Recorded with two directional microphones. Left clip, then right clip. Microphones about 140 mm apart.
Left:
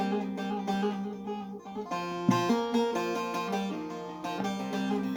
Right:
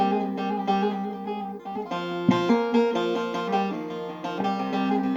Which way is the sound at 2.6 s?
25° right (ahead or behind).